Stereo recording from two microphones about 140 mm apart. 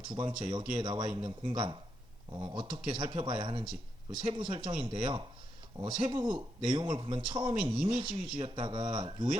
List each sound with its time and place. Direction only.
0.1 s a man's voice: 35° right (ahead or behind)